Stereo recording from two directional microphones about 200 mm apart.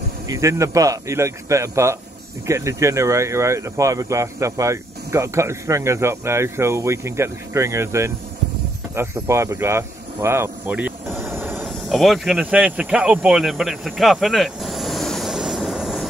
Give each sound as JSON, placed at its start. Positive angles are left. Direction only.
{"t": 0.3, "sound": "speech", "side_deg": -15}
{"t": 8.9, "sound": "a sound", "side_deg": -15}
{"t": 11.6, "sound": "speech", "side_deg": 0}